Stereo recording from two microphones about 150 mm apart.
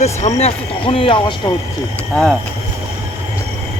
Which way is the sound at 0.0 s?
50° left (ahead or behind).